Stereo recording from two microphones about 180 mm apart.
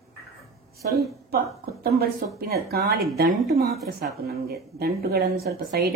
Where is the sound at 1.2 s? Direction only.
60° right (ahead or behind).